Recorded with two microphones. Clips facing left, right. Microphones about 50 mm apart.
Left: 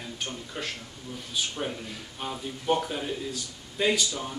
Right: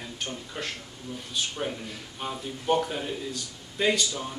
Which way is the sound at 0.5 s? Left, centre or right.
Centre.